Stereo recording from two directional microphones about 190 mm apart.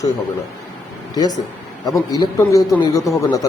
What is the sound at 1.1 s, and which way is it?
A man's voice, 20° left (ahead or behind).